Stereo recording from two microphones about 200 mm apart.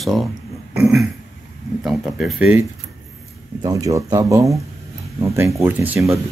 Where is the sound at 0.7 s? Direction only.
Centre (ahead or behind).